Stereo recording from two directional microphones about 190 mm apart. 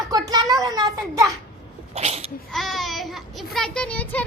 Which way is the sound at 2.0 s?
35° right (ahead or behind).